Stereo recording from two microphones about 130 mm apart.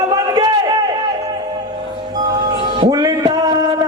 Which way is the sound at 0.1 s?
30° right (ahead or behind).